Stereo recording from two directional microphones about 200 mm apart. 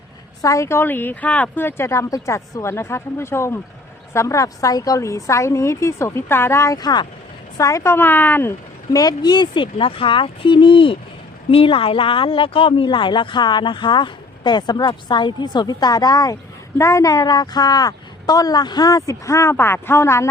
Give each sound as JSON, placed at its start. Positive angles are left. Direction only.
{"t": 0.4, "sound": "speech", "side_deg": 15}